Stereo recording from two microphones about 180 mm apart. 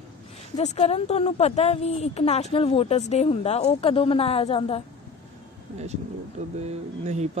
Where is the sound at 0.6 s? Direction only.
40° left (ahead or behind).